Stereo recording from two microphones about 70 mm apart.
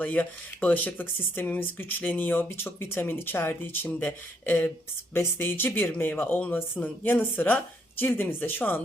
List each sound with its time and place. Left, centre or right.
0.0 s speech: left